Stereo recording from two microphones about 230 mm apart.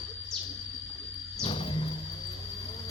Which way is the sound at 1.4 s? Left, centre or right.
Left.